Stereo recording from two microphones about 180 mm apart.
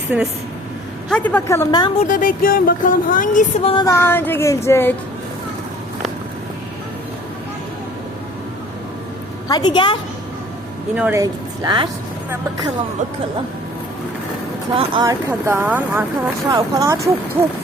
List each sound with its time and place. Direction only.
0.1 s speech: 10° right (ahead or behind)
1.1 s speech: 10° left (ahead or behind)
2.0 s speech: 50° left (ahead or behind)
3.6 s a sound: 30° left (ahead or behind)
3.8 s speech: 15° left (ahead or behind)
9.5 s a woman's voice: 25° left (ahead or behind)
10.9 s speech: 10° right (ahead or behind)
11.2 s speech: 25° right (ahead or behind)
14.8 s speech: 25° right (ahead or behind)
15.3 s speech: 10° right (ahead or behind)
16.5 s speech: 20° right (ahead or behind)